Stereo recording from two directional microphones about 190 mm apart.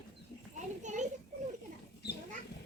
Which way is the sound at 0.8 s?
40° right (ahead or behind).